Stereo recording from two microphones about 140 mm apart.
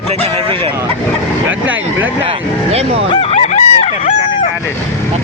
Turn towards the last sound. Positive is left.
turn(degrees=60)  # may be behind; listen again after turning